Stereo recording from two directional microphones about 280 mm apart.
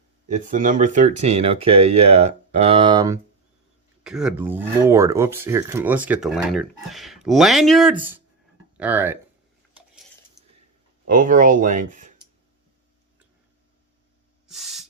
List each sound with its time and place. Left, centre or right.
0.3 s speech: right
4.0 s speech: centre
11.0 s speech: right
14.4 s spray: centre